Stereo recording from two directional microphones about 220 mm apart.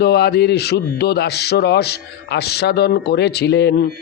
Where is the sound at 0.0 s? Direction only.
50° left (ahead or behind).